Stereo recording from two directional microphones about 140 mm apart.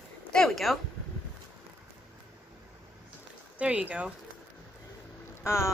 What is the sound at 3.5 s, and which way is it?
Speech, 10° right (ahead or behind).